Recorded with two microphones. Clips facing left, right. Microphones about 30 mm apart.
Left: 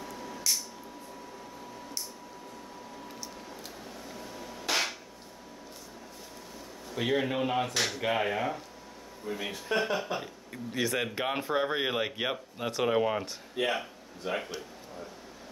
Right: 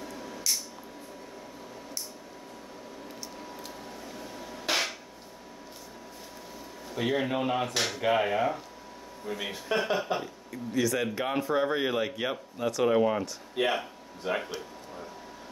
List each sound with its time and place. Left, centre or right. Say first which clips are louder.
0.0 s a sound: even; centre
4.1 s hammer: right 1 dB; centre
6.9 s speech: right 1 dB; centre
10.5 s speech: right 3 dB; left; by 13.2 s centre
13.6 s a man's voice: right 2 dB; centre